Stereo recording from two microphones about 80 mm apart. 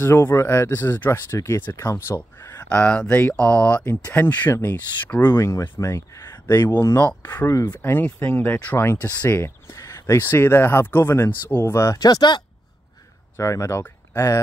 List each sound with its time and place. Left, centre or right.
0.0 s speech: left
1.6 s speech: left
5.4 s speech: left
6.5 s speech: left
7.8 s speech: left
9.8 s a sound: left
10.1 s speech: left
13.4 s speech: left